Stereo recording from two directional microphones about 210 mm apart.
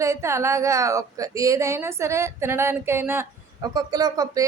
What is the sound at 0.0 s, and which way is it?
Speech, 15° right (ahead or behind).